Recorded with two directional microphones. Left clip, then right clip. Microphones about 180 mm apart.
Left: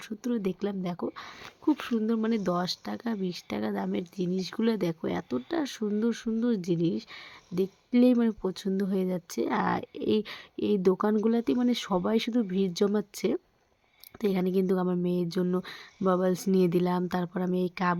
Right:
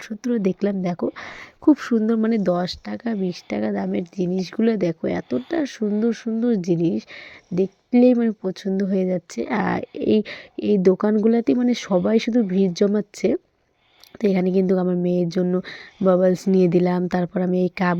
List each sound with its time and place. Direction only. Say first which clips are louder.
0.0 s speech: right 8 dB; 20° right (ahead or behind)
1.6 s speech: right 10 dB; 35° right (ahead or behind)